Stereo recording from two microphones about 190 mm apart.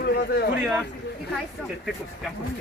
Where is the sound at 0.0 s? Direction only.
55° left (ahead or behind).